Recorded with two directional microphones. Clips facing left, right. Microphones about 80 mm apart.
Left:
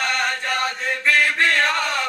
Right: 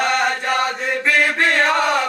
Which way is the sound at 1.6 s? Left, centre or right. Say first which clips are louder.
Right 4 dB; centre.